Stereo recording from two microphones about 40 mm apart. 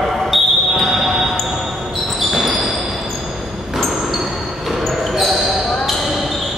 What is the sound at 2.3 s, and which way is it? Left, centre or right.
Basketball bounce, centre.